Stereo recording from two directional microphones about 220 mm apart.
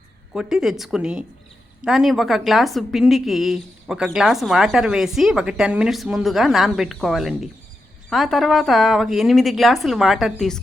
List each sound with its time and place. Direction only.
0.3 s a woman's voice: centre (ahead or behind)